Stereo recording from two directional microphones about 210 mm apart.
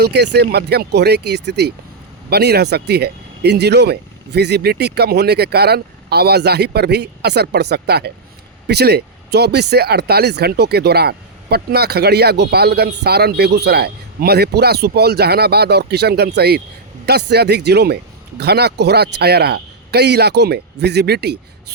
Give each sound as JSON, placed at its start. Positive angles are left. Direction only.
{"t": 0.0, "sound": "speech", "side_deg": -50}